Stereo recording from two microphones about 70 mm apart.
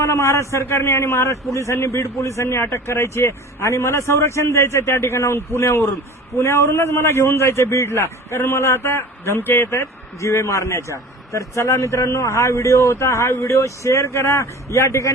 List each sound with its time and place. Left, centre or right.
0.0 s speech: left
9.7 s speech: left